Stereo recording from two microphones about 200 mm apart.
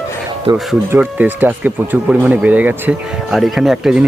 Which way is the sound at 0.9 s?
10° right (ahead or behind).